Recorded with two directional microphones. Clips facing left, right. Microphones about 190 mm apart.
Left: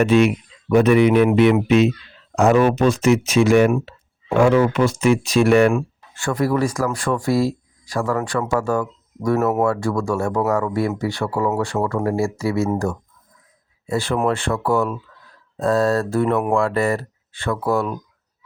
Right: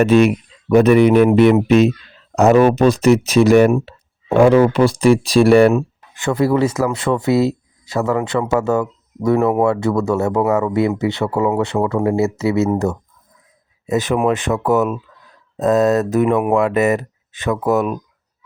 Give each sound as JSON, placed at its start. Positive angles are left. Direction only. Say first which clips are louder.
{"t": 0.0, "sound": "speech", "louder": "right 3 dB", "side_deg": -40}
{"t": 5.7, "sound": "speech", "louder": "right 4 dB", "side_deg": -20}
{"t": 9.4, "sound": "speech", "louder": "right 3 dB", "side_deg": 0}
{"t": 9.6, "sound": "speech", "louder": "right 4 dB", "side_deg": -20}
{"t": 13.8, "sound": "speech", "louder": "right 4 dB", "side_deg": -20}